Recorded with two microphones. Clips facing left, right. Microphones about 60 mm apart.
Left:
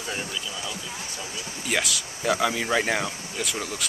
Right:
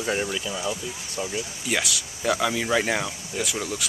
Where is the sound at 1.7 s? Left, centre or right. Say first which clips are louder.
Left 1 dB; centre.